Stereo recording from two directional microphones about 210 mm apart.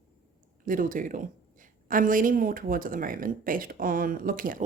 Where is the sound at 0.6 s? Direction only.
40° right (ahead or behind).